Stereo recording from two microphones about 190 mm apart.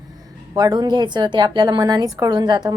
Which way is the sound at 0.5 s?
20° right (ahead or behind).